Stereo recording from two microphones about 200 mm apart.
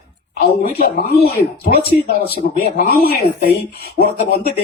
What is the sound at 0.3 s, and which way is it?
Speech, 50° left (ahead or behind).